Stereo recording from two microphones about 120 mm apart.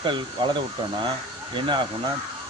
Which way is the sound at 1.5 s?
40° right (ahead or behind).